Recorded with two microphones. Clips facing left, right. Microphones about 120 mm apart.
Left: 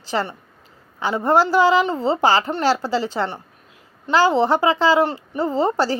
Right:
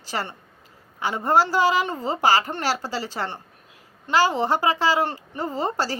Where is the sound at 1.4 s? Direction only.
20° left (ahead or behind).